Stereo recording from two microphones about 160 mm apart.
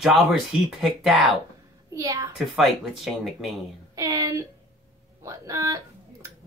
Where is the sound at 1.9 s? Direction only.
20° right (ahead or behind).